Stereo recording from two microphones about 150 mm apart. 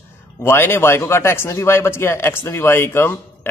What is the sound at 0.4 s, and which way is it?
A man's voice, 15° left (ahead or behind).